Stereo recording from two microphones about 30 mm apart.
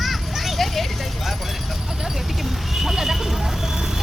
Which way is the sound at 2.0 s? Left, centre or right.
Centre.